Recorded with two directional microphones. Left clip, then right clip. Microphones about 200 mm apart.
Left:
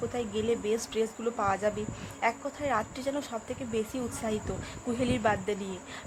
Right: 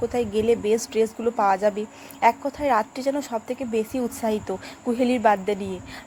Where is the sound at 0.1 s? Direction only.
20° right (ahead or behind).